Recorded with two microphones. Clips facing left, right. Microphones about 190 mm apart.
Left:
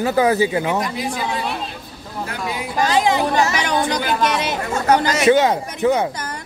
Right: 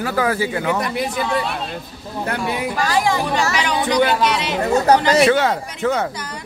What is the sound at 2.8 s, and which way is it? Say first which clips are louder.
Speech: left 3 dB; 20° left (ahead or behind).